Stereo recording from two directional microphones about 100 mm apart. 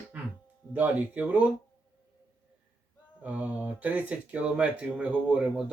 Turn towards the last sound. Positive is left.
turn(degrees=-10)  # may be behind; listen again after turning